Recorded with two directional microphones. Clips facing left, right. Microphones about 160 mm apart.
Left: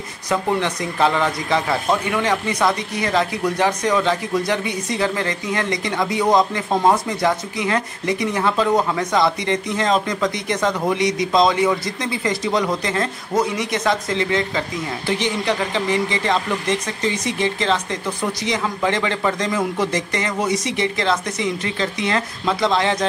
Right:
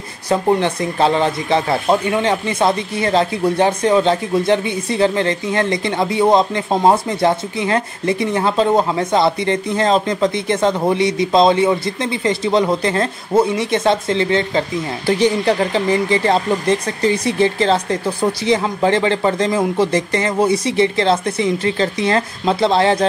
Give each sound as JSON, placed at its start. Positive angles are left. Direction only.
{"t": 0.3, "sound": "speech", "side_deg": -30}